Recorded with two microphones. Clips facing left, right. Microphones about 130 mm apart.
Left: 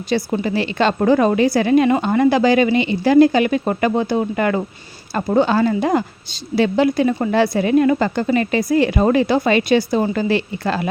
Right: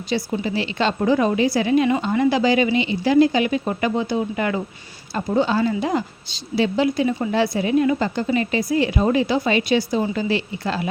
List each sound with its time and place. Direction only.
0.1 s a woman's voice: 55° left (ahead or behind)